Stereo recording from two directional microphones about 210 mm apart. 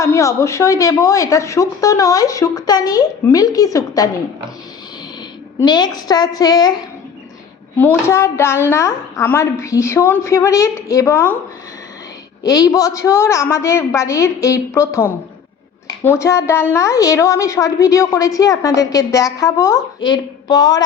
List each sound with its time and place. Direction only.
0.0 s a woman's voice: 15° left (ahead or behind)
5.5 s a woman's voice: 20° left (ahead or behind)
12.4 s a woman's voice: 20° left (ahead or behind)